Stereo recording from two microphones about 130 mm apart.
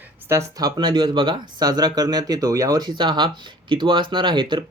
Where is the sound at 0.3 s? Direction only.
20° right (ahead or behind).